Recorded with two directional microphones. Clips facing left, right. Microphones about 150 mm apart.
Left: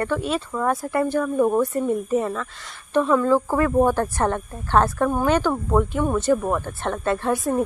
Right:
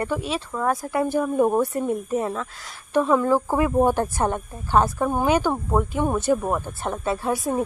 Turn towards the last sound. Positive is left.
turn(degrees=-5)  # may be behind; listen again after turning